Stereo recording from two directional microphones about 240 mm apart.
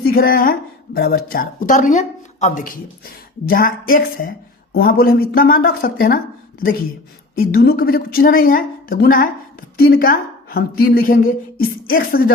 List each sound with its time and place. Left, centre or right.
0.1 s speech: left
7.3 s speech: left